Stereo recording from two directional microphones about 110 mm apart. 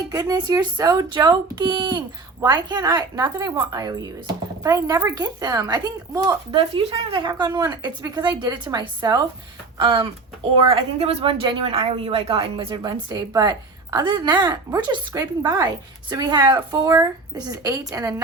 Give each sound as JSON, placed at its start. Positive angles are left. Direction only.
{"t": 0.1, "sound": "speech", "side_deg": -35}
{"t": 5.1, "sound": "speech", "side_deg": -35}
{"t": 6.5, "sound": "a woman's voice", "side_deg": -50}
{"t": 9.7, "sound": "a woman's voice", "side_deg": -50}
{"t": 11.7, "sound": "a woman's voice", "side_deg": -65}